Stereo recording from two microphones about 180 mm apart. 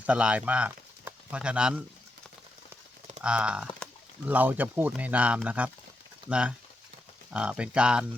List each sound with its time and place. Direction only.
0.0 s speech: 5° right (ahead or behind)
3.2 s speech: 5° right (ahead or behind)